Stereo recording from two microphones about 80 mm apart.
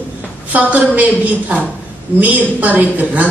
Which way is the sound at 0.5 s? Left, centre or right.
Centre.